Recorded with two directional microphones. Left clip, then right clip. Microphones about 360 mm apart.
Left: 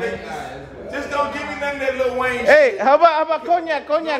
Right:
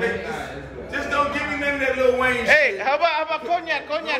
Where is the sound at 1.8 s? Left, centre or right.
Left.